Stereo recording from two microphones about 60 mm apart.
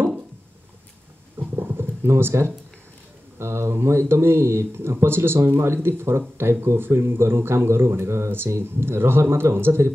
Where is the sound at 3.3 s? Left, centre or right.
Right.